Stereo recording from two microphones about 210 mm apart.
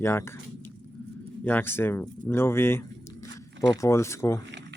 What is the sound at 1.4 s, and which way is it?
Speech, 10° left (ahead or behind).